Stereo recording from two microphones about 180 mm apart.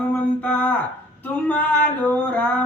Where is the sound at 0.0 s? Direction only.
10° left (ahead or behind).